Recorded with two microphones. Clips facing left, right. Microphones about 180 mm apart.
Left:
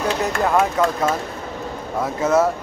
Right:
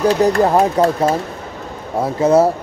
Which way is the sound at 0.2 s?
35° right (ahead or behind).